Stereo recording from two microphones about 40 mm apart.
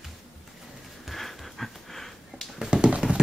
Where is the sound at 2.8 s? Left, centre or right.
Right.